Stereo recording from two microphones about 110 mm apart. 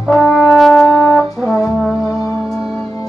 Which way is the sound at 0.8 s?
20° left (ahead or behind).